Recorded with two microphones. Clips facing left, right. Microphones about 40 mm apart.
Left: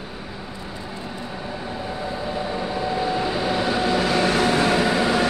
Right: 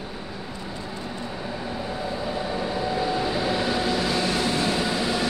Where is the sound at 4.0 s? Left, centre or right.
Left.